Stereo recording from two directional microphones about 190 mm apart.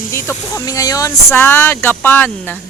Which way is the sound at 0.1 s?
15° left (ahead or behind).